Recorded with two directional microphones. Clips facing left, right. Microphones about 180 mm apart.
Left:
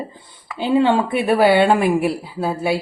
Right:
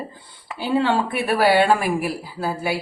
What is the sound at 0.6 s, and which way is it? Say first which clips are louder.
A woman's voice: left 4 dB; 20° left (ahead or behind).